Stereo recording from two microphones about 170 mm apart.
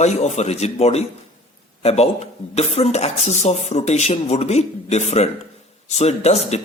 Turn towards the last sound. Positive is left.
turn(degrees=40)  # may be behind; listen again after turning